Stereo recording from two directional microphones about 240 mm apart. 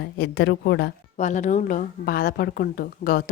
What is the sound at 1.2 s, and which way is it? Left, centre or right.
A woman's voice, left.